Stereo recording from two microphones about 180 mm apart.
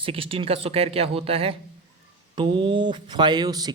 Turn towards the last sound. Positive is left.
turn(degrees=-20)  # may be behind; listen again after turning